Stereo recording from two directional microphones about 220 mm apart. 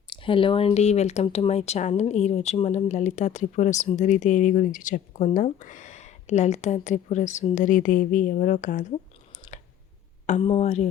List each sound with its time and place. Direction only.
0.1 s speech: 25° left (ahead or behind)
9.5 s clicking: 30° left (ahead or behind)
10.2 s speech: 30° left (ahead or behind)